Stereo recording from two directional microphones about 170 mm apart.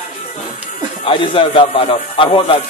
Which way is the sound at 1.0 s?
30° left (ahead or behind).